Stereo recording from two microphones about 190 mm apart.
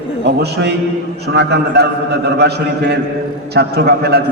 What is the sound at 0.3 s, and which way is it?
A man's voice, 60° right (ahead or behind).